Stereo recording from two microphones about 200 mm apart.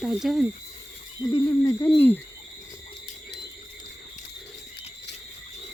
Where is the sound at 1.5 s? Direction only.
15° left (ahead or behind).